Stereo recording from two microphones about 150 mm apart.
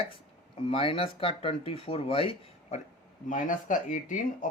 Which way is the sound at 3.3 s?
60° left (ahead or behind).